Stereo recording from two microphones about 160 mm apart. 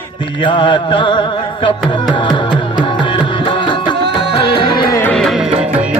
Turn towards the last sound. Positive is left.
turn(degrees=0)  # may be behind; listen again after turning